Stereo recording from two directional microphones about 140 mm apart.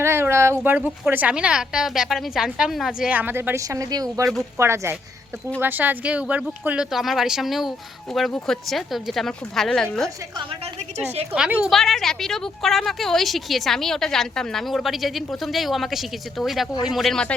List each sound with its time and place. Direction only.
0.0 s a woman's voice: 20° right (ahead or behind); by 10.1 s 5° left (ahead or behind)
10.9 s a woman's voice: 50° right (ahead or behind)
11.3 s a woman's voice: 10° right (ahead or behind)